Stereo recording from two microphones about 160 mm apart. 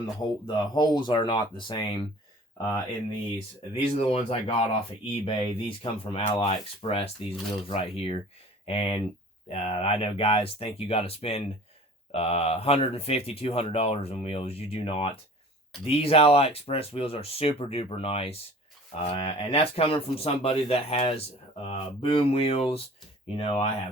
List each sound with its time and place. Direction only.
0.0 s speech: 25° left (ahead or behind)
3.8 s speech: 40° left (ahead or behind)